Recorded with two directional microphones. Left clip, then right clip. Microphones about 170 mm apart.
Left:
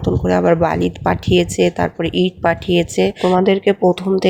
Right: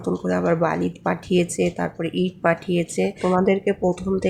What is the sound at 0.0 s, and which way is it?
Speech, 20° left (ahead or behind).